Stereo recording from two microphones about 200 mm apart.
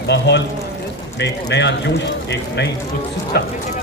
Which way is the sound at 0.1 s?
60° left (ahead or behind).